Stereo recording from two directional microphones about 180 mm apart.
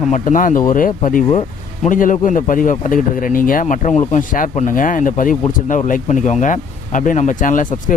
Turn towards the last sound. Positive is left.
turn(degrees=45)  # may be behind; listen again after turning